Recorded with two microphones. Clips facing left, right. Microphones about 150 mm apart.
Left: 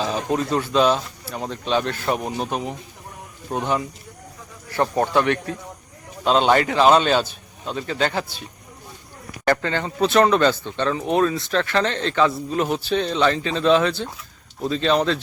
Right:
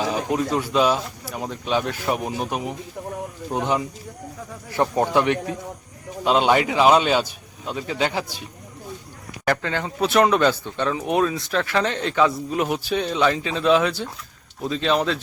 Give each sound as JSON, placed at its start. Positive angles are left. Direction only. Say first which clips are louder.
{"t": 0.0, "sound": "speech", "louder": "even", "side_deg": -15}
{"t": 9.4, "sound": "speech", "louder": "left 2 dB", "side_deg": 0}